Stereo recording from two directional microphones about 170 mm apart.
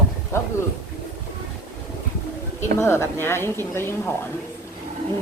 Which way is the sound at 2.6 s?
15° left (ahead or behind).